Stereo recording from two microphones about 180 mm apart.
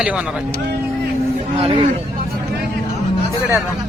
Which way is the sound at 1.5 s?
35° right (ahead or behind).